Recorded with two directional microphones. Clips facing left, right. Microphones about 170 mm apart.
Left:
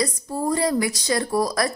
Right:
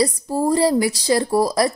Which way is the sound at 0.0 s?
30° right (ahead or behind).